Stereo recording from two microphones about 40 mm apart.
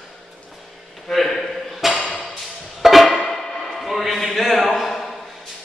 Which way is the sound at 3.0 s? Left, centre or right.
Centre.